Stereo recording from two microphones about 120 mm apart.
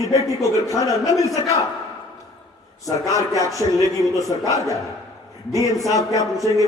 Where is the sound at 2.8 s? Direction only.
25° left (ahead or behind).